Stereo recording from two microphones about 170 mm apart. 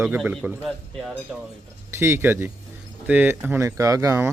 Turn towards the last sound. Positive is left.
turn(degrees=-15)  # may be behind; listen again after turning